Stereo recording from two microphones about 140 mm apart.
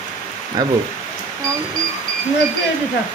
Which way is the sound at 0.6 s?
25° right (ahead or behind).